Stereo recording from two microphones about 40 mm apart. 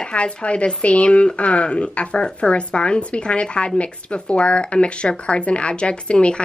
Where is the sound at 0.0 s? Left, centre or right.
Left.